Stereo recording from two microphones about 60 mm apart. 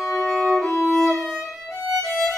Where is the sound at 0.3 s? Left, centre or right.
Centre.